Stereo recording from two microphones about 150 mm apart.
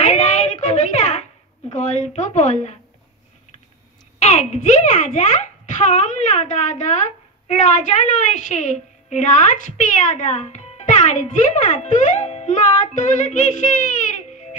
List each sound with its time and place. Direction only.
0.0 s a sound: 50° left (ahead or behind)
1.7 s a child's voice: 50° left (ahead or behind)
4.2 s a child's voice: 50° left (ahead or behind)